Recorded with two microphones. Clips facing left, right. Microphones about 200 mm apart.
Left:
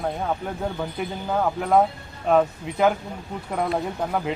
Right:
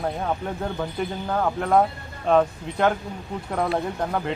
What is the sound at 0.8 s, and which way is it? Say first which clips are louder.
Speech: right 1 dB; 5° left (ahead or behind).